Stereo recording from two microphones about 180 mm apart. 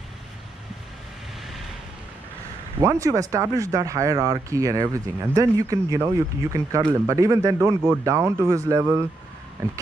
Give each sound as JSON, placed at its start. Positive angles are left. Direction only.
{"t": 2.8, "sound": "speech", "side_deg": -20}